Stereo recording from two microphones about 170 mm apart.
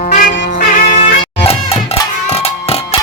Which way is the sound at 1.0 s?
35° left (ahead or behind).